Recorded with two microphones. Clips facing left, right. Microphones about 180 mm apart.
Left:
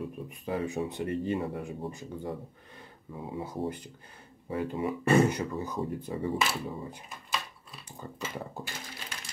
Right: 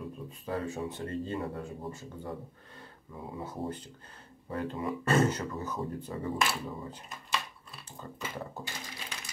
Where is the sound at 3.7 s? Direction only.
10° left (ahead or behind).